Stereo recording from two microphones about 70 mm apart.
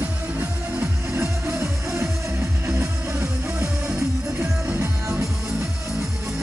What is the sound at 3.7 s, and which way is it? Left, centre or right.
Music, centre.